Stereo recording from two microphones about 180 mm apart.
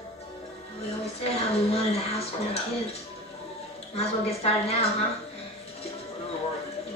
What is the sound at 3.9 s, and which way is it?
Speech, 35° left (ahead or behind).